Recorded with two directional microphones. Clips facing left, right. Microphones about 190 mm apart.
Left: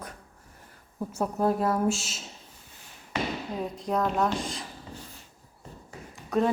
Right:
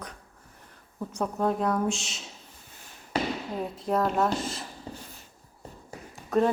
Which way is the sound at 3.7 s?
Centre (ahead or behind).